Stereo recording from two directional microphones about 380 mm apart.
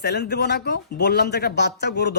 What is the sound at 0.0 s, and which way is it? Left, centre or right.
Speech, left.